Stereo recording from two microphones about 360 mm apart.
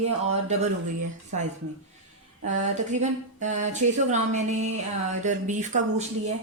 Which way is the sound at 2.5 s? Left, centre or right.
Centre.